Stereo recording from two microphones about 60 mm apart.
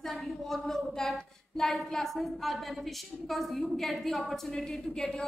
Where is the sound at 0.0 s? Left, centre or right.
Centre.